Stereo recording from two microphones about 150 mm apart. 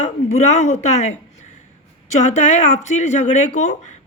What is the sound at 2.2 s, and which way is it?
Speech, 50° left (ahead or behind).